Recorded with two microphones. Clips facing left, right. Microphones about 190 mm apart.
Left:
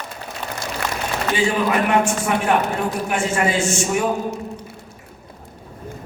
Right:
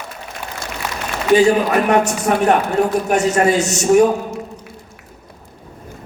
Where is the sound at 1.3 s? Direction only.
40° right (ahead or behind).